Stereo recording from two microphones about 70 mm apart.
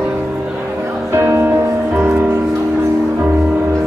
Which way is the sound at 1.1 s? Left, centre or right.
Right.